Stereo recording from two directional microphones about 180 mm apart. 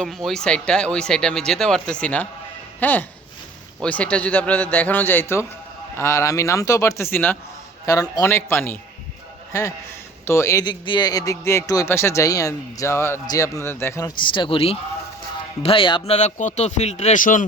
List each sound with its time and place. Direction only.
0.0 s a man's voice: centre (ahead or behind); by 17.4 s 45° left (ahead or behind)